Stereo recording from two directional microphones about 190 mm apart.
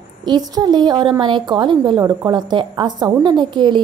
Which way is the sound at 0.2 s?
20° right (ahead or behind).